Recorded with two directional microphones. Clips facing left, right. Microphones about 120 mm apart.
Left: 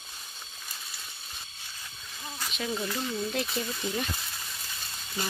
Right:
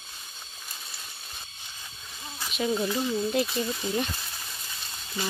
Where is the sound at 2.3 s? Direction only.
10° right (ahead or behind).